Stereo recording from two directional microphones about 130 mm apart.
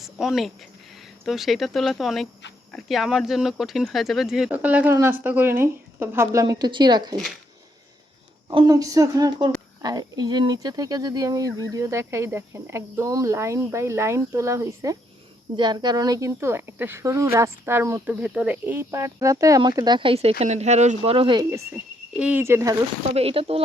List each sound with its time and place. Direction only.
0.0 s speech: 5° right (ahead or behind); by 6.4 s 20° right (ahead or behind)
6.4 s speech: 30° right (ahead or behind)
8.5 s speech: 30° right (ahead or behind)
15.5 s speech: 35° right (ahead or behind)
22.1 s speech: 10° right (ahead or behind)
23.1 s speech: 45° right (ahead or behind)